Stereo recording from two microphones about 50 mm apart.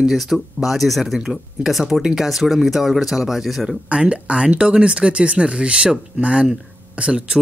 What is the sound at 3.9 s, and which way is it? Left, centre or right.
Speech, right.